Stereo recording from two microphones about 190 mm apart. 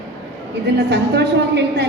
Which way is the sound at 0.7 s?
60° right (ahead or behind).